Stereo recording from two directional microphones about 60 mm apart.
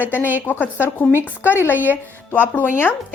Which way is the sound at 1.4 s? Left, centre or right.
Right.